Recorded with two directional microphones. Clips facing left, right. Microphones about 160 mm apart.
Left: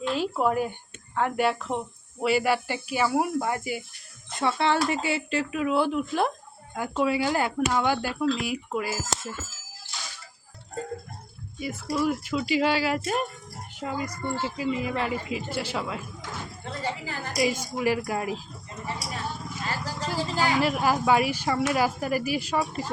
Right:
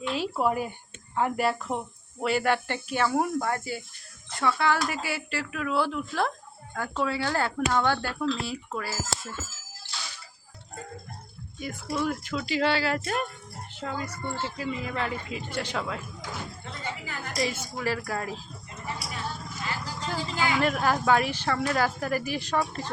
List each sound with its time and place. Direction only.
0.1 s speech: centre (ahead or behind)
2.2 s speech: 10° left (ahead or behind)
11.6 s speech: 5° left (ahead or behind)
16.8 s a woman's voice: 35° left (ahead or behind)
17.3 s speech: 15° left (ahead or behind)
18.9 s clip-clop: 40° left (ahead or behind)
19.6 s vehicle: 40° left (ahead or behind)
20.1 s a woman's voice: 40° left (ahead or behind)
20.6 s speech: 5° left (ahead or behind)